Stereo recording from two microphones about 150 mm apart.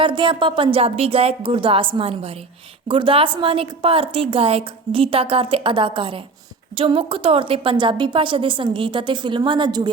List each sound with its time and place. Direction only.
0.0 s a woman's voice: 35° right (ahead or behind)